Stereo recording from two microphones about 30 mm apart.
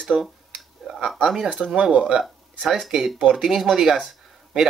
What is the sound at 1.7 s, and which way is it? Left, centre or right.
Speech, right.